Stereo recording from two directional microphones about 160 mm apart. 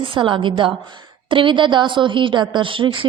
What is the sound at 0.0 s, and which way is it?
A woman's voice, 30° right (ahead or behind).